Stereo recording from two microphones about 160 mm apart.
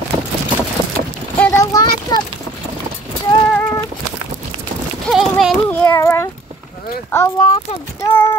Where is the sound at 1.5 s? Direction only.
25° left (ahead or behind).